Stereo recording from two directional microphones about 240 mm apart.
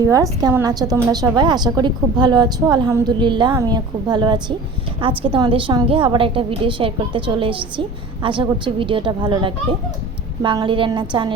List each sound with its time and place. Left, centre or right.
0.0 s a woman's voice: centre